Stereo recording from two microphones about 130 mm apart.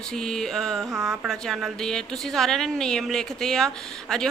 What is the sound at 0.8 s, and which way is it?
Speech, 20° right (ahead or behind).